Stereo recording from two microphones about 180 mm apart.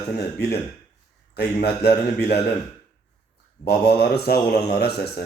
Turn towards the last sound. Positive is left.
turn(degrees=60)  # may be behind; listen again after turning